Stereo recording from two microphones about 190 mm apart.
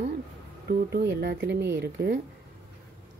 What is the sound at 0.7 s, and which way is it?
Speech, 60° right (ahead or behind).